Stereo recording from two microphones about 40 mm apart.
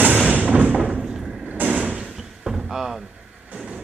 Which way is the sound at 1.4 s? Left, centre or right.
Right.